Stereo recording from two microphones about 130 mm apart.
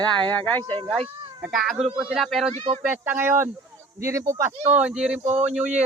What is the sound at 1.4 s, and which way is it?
Speech, 5° right (ahead or behind).